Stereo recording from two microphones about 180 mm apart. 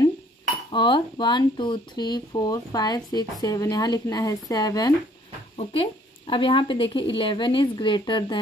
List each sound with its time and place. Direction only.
0.7 s speech: 25° left (ahead or behind)
5.6 s speech: 30° left (ahead or behind)